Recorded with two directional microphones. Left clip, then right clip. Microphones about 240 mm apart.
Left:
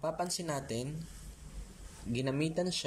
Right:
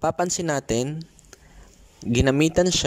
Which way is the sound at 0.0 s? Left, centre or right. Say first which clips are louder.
Right 12 dB; right.